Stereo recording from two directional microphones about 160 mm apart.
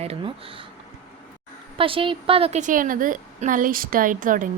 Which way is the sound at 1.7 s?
35° right (ahead or behind).